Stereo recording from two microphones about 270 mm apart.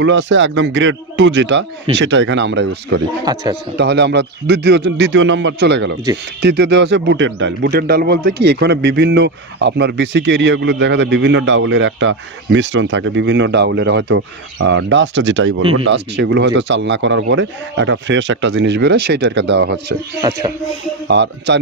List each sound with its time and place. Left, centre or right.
0.0 s speech: right
3.3 s music: centre
3.7 s speech: right
20.2 s music: centre
21.1 s speech: right